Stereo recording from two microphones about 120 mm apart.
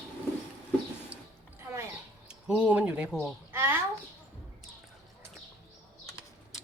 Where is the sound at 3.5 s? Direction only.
20° right (ahead or behind).